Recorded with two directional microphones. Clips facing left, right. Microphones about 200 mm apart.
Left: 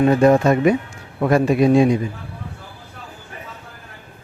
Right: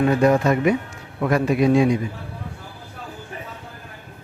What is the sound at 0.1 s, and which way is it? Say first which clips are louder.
A man's voice: left 3 dB; 30° left (ahead or behind).